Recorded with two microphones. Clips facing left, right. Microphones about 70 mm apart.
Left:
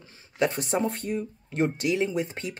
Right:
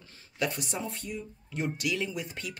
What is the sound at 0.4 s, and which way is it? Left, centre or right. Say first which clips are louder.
Speech: left 7 dB; left.